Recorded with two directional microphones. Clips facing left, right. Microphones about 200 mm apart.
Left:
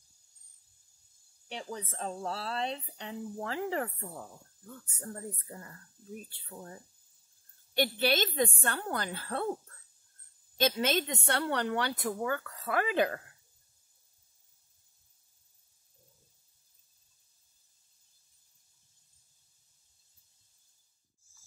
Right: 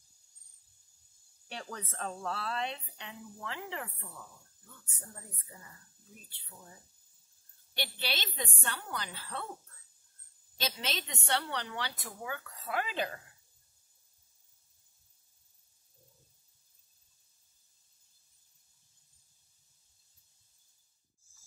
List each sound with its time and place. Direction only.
1.5 s speech: 20° left (ahead or behind); by 4.4 s 40° left (ahead or behind)
5.1 s a woman's voice: 55° left (ahead or behind)
7.7 s a woman's voice: 50° left (ahead or behind)
10.6 s a woman's voice: 50° left (ahead or behind)